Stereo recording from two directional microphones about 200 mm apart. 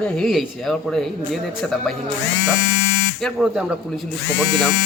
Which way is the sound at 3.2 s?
Centre (ahead or behind).